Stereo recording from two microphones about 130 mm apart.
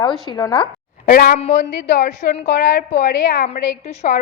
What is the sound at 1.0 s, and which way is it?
Speech, 90° left.